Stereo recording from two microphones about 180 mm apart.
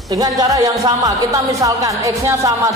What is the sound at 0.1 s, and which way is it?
Speech, 20° right (ahead or behind).